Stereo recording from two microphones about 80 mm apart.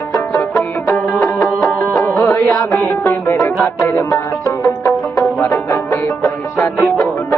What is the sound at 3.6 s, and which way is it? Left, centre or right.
Music, left.